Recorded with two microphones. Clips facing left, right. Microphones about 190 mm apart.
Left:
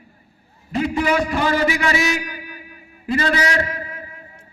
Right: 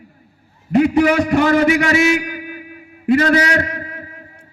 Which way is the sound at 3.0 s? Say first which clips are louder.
Right 7 dB; 55° right (ahead or behind).